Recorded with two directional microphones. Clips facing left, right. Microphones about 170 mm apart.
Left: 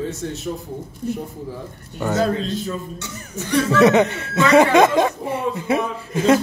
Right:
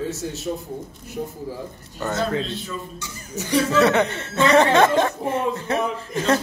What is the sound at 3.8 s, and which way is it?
Speech, 15° left (ahead or behind).